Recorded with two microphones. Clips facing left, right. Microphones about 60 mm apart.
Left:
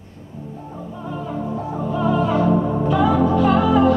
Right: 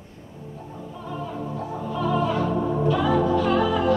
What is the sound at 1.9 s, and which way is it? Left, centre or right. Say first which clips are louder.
Music: left 4 dB; left.